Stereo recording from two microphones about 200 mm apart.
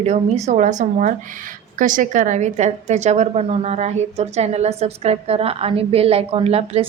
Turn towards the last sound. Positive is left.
turn(degrees=-30)  # may be behind; listen again after turning